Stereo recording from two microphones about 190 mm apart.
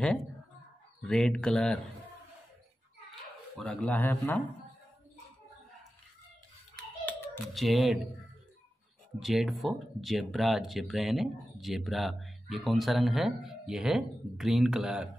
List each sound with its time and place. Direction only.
1.0 s speech: 5° left (ahead or behind)
3.5 s speech: 5° left (ahead or behind)
6.7 s a sound: 5° left (ahead or behind)
9.2 s speech: centre (ahead or behind)